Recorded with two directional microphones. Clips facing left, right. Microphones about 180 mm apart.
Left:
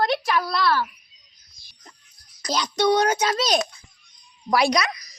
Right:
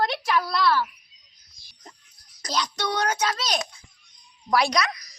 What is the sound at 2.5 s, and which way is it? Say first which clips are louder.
Child singing: left 7 dB; 15° left (ahead or behind).